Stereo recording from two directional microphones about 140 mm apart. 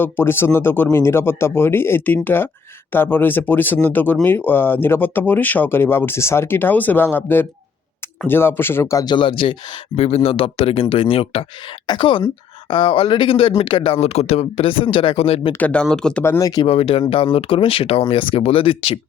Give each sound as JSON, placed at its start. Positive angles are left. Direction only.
{"t": 0.0, "sound": "speech", "side_deg": 15}
{"t": 15.5, "sound": "speech", "side_deg": 10}
{"t": 16.2, "sound": "speech", "side_deg": 15}
{"t": 16.6, "sound": "speech", "side_deg": 45}